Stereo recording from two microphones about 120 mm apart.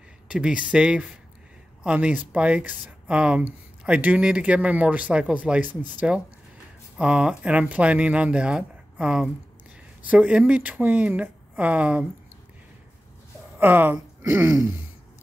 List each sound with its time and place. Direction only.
0.3 s speech: 10° right (ahead or behind)
13.6 s speech: 15° right (ahead or behind)